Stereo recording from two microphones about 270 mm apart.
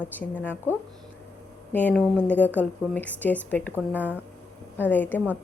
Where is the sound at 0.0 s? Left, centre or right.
Centre.